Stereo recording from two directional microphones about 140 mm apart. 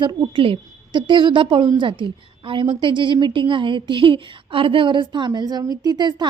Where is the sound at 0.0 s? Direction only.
35° right (ahead or behind).